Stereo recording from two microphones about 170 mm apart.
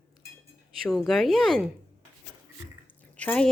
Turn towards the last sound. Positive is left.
turn(degrees=5)  # may be behind; listen again after turning